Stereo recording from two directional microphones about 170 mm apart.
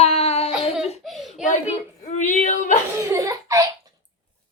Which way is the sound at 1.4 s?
45° left (ahead or behind).